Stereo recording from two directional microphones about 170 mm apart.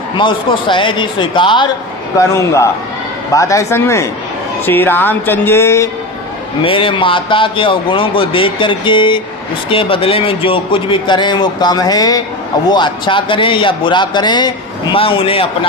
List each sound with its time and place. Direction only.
0.2 s a man's voice: 30° left (ahead or behind)
2.1 s speech: 15° left (ahead or behind)
6.6 s a man's voice: 30° left (ahead or behind)